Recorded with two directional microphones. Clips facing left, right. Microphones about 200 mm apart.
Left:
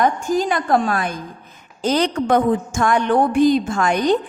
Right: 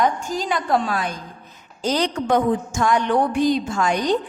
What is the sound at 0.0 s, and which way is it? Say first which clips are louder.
A woman's voice: left 4 dB; 50° left (ahead or behind).